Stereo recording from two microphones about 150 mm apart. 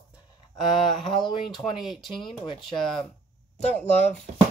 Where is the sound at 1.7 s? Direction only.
Centre (ahead or behind).